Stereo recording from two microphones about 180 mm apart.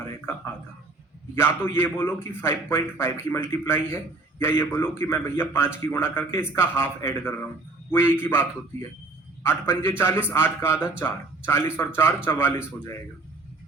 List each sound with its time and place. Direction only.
1.4 s a man's voice: 15° left (ahead or behind)